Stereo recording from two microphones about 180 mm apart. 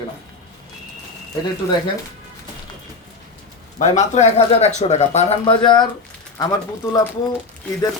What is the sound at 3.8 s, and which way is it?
Speech, 40° left (ahead or behind).